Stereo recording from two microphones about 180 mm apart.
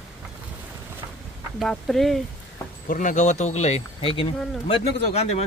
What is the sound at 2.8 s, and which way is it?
Speech, 45° left (ahead or behind).